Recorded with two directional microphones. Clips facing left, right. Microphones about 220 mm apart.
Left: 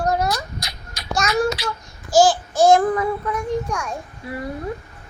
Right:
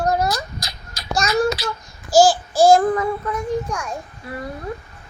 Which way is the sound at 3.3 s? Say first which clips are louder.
Even; 5° right (ahead or behind).